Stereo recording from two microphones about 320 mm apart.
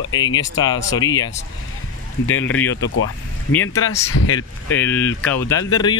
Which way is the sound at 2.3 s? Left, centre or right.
Centre.